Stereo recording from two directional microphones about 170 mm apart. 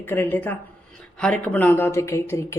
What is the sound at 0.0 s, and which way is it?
Speech, 10° left (ahead or behind).